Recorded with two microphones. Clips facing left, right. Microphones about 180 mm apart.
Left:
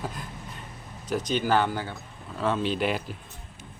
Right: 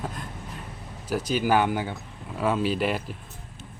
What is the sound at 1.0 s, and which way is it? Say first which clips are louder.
Speech: right 1 dB; 5° right (ahead or behind).